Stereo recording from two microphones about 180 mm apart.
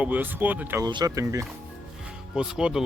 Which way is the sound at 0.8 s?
20° right (ahead or behind).